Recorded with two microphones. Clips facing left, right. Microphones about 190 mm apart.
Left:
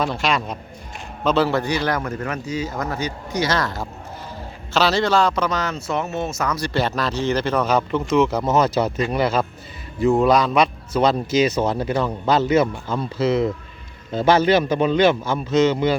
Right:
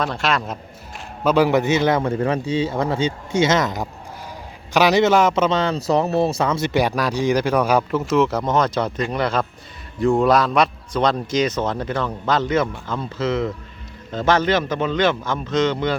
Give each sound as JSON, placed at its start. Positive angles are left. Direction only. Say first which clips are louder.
{"t": 0.0, "sound": "speech", "louder": "even", "side_deg": 0}
{"t": 6.7, "sound": "speech", "louder": "right 2 dB", "side_deg": -15}